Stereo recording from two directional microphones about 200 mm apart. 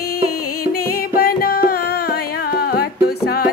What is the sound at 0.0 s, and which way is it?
Music, 50° left (ahead or behind).